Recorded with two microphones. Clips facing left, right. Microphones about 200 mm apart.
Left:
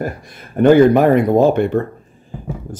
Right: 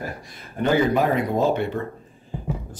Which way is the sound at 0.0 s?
50° left (ahead or behind).